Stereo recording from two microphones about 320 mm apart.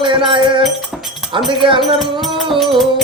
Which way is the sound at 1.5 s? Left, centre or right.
Centre.